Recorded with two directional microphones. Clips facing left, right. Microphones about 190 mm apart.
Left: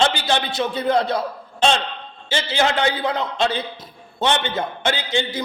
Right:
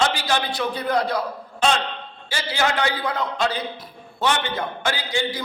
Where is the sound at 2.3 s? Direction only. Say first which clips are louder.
Left 3 dB; 25° left (ahead or behind).